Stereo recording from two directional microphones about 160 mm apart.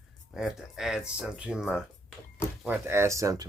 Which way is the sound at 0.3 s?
Centre (ahead or behind).